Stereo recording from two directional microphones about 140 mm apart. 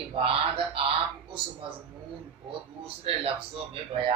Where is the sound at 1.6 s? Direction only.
40° right (ahead or behind).